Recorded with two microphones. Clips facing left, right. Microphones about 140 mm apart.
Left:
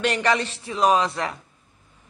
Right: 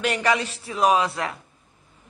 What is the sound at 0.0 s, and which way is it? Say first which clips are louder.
A woman's voice: left 1 dB; 5° right (ahead or behind).